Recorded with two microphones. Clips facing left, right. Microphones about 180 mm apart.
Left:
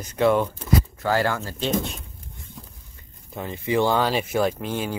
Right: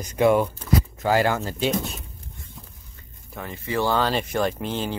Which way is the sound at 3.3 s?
20° left (ahead or behind).